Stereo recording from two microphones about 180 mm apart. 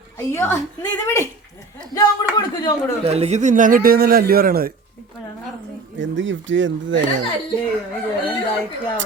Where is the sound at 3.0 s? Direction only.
35° right (ahead or behind); by 4.7 s 55° right (ahead or behind).